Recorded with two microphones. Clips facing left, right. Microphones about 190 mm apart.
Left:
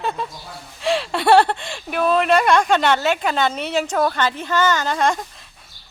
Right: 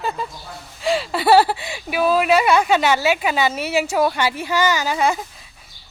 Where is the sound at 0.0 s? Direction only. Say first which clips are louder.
Even; centre (ahead or behind).